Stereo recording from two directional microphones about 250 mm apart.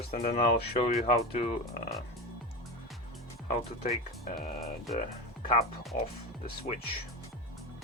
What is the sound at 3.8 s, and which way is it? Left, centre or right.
Speech, left.